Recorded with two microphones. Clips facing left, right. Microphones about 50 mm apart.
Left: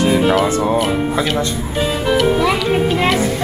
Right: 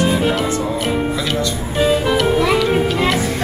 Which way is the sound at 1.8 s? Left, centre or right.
Centre.